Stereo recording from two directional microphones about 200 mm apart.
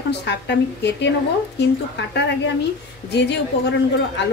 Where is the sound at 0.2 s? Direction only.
60° left (ahead or behind).